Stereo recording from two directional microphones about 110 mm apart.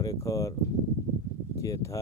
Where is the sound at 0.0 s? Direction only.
30° left (ahead or behind).